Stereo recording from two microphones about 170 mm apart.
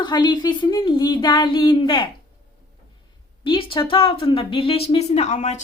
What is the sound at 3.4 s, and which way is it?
Speech, 30° left (ahead or behind).